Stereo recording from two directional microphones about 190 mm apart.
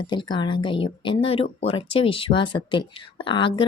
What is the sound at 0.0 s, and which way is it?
Speech, 25° left (ahead or behind).